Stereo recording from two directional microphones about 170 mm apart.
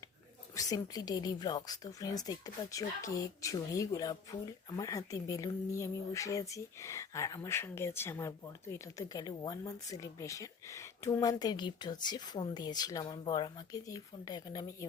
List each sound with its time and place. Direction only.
0.5 s speech: 20° left (ahead or behind)